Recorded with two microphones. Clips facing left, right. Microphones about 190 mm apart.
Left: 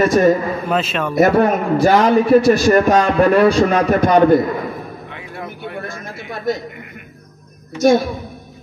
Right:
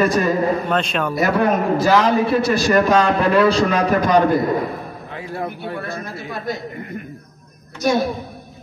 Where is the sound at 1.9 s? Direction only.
45° left (ahead or behind).